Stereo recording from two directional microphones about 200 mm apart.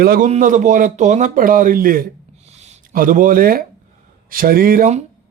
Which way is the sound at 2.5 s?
35° right (ahead or behind).